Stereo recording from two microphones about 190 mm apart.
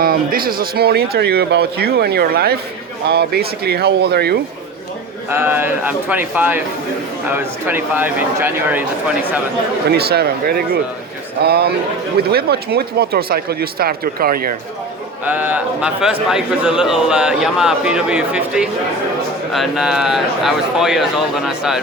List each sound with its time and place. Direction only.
0.0 s speech: 50° right (ahead or behind)
5.3 s speech: 10° right (ahead or behind)
9.9 s speech: 55° right (ahead or behind)
15.2 s a man's voice: 10° right (ahead or behind)